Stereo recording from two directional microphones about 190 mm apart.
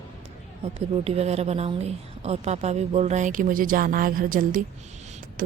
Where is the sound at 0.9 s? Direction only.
35° right (ahead or behind).